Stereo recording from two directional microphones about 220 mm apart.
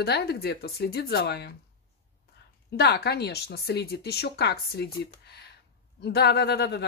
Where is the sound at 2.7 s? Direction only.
50° left (ahead or behind).